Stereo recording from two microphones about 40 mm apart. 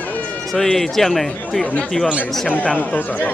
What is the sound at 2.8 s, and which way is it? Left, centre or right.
Speech, left.